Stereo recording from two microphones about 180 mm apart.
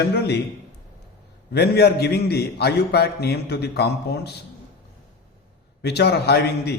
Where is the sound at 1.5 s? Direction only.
65° left (ahead or behind).